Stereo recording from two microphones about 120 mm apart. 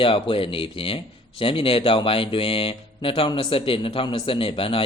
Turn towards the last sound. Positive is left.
turn(degrees=50)  # may be behind; listen again after turning